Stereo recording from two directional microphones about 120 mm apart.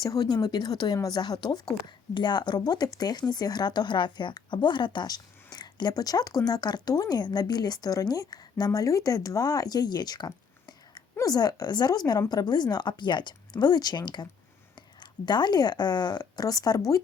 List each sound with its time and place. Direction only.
0.0 s speech: 35° left (ahead or behind)
15.3 s speech: 35° left (ahead or behind)